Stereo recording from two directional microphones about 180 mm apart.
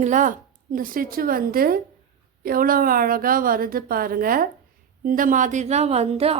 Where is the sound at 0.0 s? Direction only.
45° right (ahead or behind).